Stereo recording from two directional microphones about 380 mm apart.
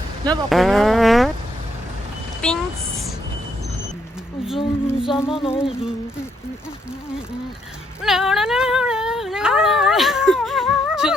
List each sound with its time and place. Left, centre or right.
0.5 s music: centre
2.4 s music: centre
4.5 s speech: centre
5.0 s music: centre
5.3 s speech: centre
8.0 s a sound: centre